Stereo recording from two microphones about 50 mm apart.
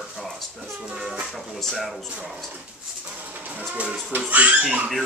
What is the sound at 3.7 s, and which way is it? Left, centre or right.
Speech, centre.